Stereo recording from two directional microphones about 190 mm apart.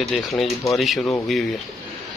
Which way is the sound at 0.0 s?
Centre (ahead or behind).